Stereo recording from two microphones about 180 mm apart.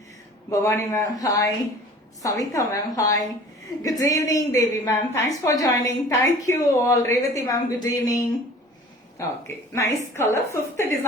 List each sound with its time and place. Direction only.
0.5 s a woman's voice: 15° left (ahead or behind)